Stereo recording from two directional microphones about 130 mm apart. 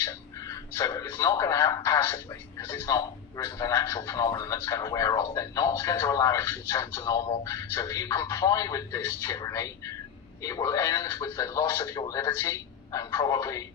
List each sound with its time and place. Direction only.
0.0 s speech: 25° left (ahead or behind)